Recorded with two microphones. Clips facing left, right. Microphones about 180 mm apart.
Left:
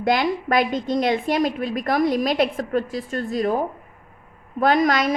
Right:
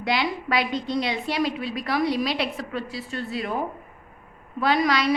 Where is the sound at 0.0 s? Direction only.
50° left (ahead or behind).